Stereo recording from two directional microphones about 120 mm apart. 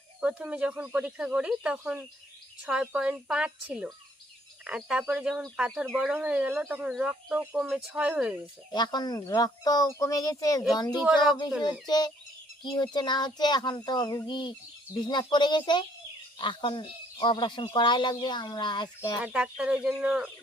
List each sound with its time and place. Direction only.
0.2 s speech: 10° right (ahead or behind)
8.7 s speech: 35° left (ahead or behind)
19.2 s speech: 10° right (ahead or behind)